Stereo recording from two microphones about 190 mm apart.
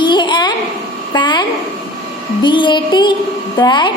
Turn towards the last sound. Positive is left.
turn(degrees=25)  # may be behind; listen again after turning